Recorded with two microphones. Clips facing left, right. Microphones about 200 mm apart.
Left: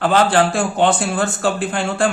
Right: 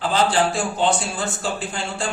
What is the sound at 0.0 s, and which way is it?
Speech, 60° left (ahead or behind).